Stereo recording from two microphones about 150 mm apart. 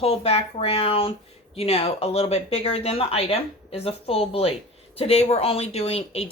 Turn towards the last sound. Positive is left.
turn(degrees=40)  # may be behind; listen again after turning